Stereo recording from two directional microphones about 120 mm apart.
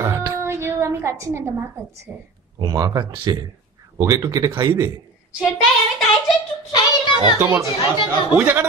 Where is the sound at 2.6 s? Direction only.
30° right (ahead or behind).